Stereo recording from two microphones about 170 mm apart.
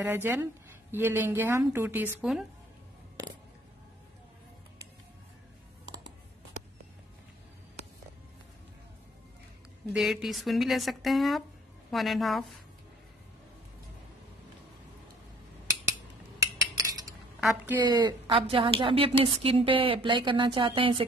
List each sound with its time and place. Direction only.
0.0 s speech: 10° right (ahead or behind)
9.9 s speech: centre (ahead or behind)
16.3 s cutlery: 20° right (ahead or behind)
17.4 s a woman's voice: 5° right (ahead or behind)
17.8 s a woman's voice: 25° right (ahead or behind)